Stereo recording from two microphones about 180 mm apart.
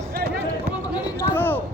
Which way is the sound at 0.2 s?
60° right (ahead or behind).